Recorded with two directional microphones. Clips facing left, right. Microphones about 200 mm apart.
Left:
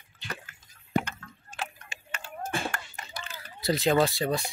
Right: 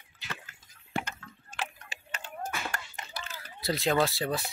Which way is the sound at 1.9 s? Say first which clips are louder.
Even; 35° right (ahead or behind).